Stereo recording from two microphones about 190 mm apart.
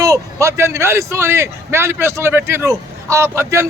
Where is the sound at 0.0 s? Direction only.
15° right (ahead or behind).